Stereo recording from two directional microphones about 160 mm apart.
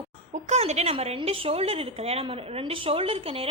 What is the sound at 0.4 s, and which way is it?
A woman's voice, 45° right (ahead or behind).